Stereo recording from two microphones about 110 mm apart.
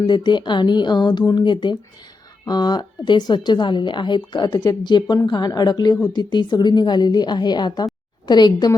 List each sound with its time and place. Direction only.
0.0 s a woman's voice: 45° left (ahead or behind)